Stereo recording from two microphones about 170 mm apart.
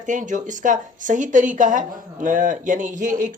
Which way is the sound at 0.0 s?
50° right (ahead or behind).